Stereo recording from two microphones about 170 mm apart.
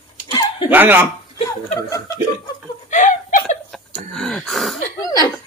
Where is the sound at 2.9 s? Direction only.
45° left (ahead or behind).